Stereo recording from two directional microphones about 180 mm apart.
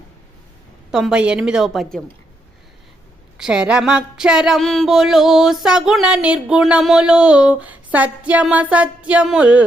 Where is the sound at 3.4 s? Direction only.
5° right (ahead or behind).